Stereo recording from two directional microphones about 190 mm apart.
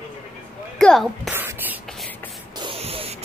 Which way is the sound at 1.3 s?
10° right (ahead or behind).